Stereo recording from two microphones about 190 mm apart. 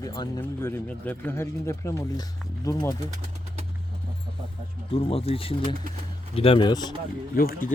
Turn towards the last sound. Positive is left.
turn(degrees=50)  # may be behind; listen again after turning